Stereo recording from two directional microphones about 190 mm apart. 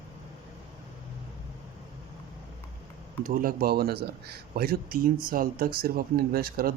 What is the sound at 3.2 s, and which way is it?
Speech, 50° right (ahead or behind).